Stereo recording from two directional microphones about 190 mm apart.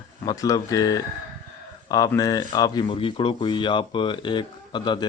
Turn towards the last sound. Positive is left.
turn(degrees=25)  # may be behind; listen again after turning